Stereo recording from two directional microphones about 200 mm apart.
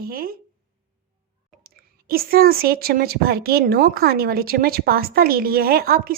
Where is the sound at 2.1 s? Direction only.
50° right (ahead or behind).